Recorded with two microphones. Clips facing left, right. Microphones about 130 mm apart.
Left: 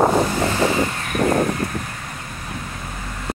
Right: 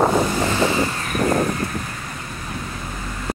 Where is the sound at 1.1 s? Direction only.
30° left (ahead or behind).